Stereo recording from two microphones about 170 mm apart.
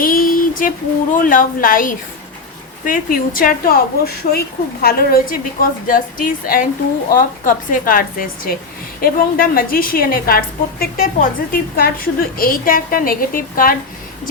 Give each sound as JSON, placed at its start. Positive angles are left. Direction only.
{"t": 0.0, "sound": "female singing", "side_deg": 55}
{"t": 1.1, "sound": "a woman's voice", "side_deg": 50}